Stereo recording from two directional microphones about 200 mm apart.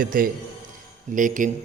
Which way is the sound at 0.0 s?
45° right (ahead or behind).